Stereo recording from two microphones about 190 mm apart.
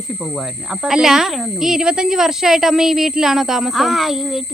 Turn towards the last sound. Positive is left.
turn(degrees=0)  # may be behind; listen again after turning